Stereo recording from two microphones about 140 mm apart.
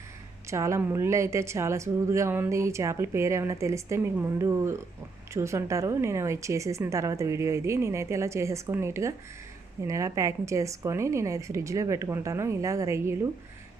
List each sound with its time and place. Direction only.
0.5 s speech: 20° right (ahead or behind)